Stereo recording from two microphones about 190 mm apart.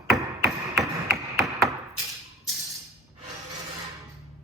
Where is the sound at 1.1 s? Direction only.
15° right (ahead or behind).